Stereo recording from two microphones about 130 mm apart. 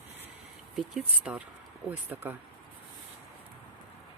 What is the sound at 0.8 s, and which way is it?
Speech, 5° right (ahead or behind).